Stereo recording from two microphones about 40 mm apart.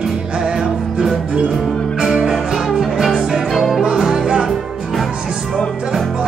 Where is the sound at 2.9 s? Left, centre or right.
Centre.